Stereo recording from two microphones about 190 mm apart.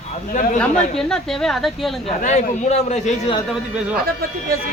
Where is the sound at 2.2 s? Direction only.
40° left (ahead or behind).